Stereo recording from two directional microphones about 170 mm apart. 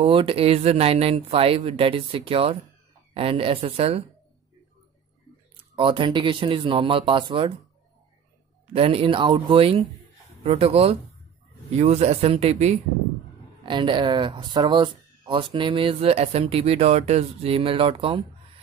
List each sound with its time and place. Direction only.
0.0 s speech: 30° right (ahead or behind)
5.8 s speech: 30° right (ahead or behind)
8.7 s speech: 35° right (ahead or behind)
13.7 s speech: 30° right (ahead or behind)